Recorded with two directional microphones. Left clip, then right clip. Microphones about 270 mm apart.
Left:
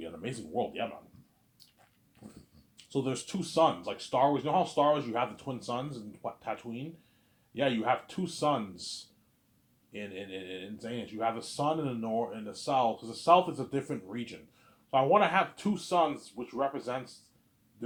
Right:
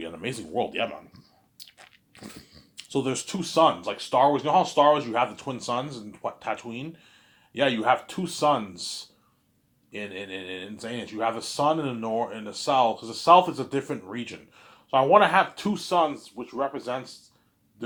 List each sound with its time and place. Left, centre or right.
0.0 s speech: centre
9.9 s speech: centre